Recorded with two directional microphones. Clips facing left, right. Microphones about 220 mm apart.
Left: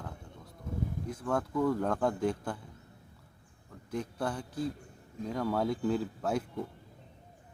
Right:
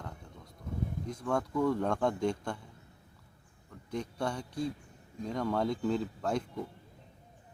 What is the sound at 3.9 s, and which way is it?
Speech, 5° left (ahead or behind).